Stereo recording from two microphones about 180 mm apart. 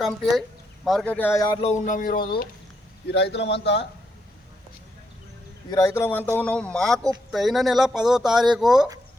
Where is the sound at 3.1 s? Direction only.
75° left (ahead or behind).